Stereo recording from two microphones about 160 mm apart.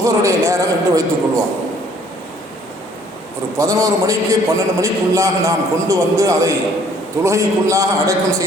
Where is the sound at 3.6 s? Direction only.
20° right (ahead or behind).